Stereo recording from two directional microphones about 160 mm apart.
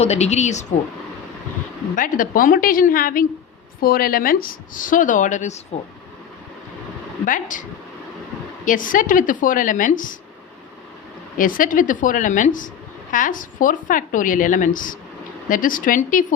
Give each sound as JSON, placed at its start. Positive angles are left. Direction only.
{"t": 0.0, "sound": "a woman's voice", "side_deg": 45}
{"t": 2.0, "sound": "a woman's voice", "side_deg": 60}
{"t": 7.3, "sound": "a woman's voice", "side_deg": 55}
{"t": 11.3, "sound": "a woman's voice", "side_deg": 60}